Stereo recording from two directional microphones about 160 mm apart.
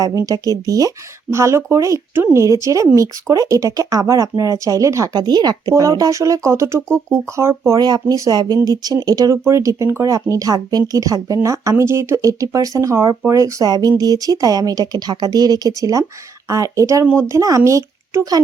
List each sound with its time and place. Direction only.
0.0 s speech: 20° right (ahead or behind)